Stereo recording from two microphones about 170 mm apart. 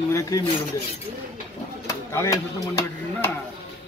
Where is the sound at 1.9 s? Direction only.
15° left (ahead or behind).